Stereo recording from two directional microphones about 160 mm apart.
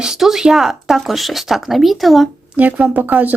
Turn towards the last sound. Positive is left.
turn(degrees=-10)  # may be behind; listen again after turning